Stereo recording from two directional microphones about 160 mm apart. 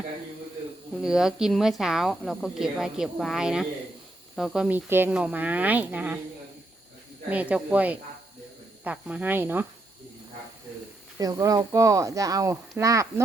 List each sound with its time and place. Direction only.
1.0 s a woman's voice: 5° right (ahead or behind)
7.3 s speech: 10° right (ahead or behind)
11.2 s speech: 20° right (ahead or behind)